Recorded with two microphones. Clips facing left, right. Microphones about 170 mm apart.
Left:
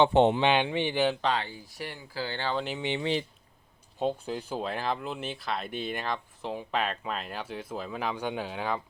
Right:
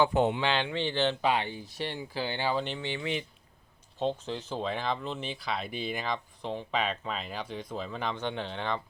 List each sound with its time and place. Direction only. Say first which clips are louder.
0.0 s speech: left 4 dB; 25° left (ahead or behind)
1.2 s speech: right 1 dB; 15° right (ahead or behind)
2.6 s speech: even; 5° left (ahead or behind)
2.8 s speech: left 4 dB; 20° left (ahead or behind)
3.9 s speech: left 1 dB; 10° left (ahead or behind)